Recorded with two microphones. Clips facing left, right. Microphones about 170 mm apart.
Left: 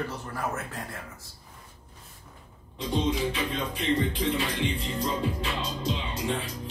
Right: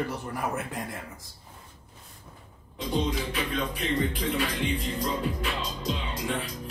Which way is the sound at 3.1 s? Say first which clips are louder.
Left 2 dB; 25° left (ahead or behind).